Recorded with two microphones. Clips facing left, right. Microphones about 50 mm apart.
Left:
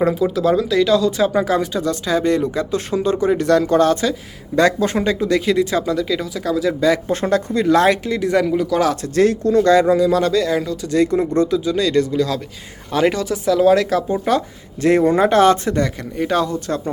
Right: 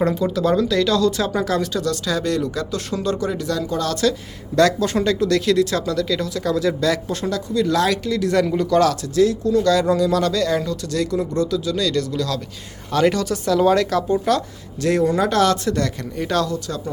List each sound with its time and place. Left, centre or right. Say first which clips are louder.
0.0 s speech: left 3 dB; centre
3.3 s speech: left 8 dB; left
4.0 s speech: right 1 dB; centre
7.1 s speech: left 5 dB; left; by 8.4 s centre
8.4 s speech: even; centre
9.0 s speech: left 2 dB; left
9.8 s speech: left 3 dB; centre
10.8 s speech: left 5 dB; left; by 14.0 s centre
14.1 s speech: left 1 dB; centre
14.8 s speech: left 4 dB; left
16.5 s speech: left 4 dB; left